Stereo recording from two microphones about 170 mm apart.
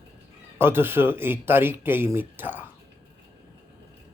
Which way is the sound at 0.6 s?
15° right (ahead or behind).